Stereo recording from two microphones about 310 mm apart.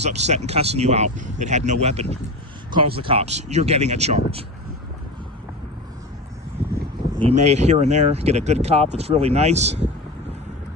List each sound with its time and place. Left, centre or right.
0.0 s speech: right
7.2 s speech: centre